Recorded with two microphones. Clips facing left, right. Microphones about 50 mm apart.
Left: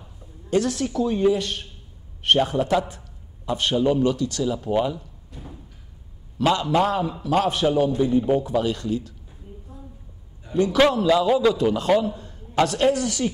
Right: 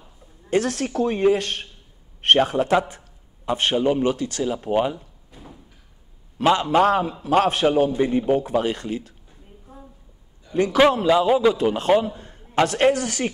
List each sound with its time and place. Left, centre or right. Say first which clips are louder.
0.5 s a woman's voice: even; right
6.3 s a man's voice: right 2 dB; right
9.7 s a sound: right 3 dB; right
10.5 s a man's voice: even; right
10.9 s a man's voice: right 1 dB; right
11.5 s a man's voice: right 1 dB; right